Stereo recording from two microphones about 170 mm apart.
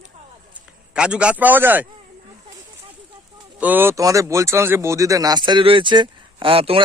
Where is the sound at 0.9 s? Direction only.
5° right (ahead or behind).